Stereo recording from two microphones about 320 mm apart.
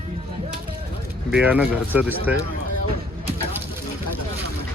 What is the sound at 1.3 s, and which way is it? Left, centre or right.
Speech, centre.